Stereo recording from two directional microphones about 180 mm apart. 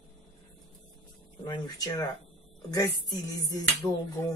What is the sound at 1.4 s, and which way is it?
Speech, 25° left (ahead or behind).